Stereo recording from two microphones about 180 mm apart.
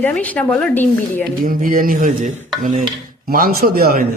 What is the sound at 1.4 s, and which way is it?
A man's voice, 50° right (ahead or behind).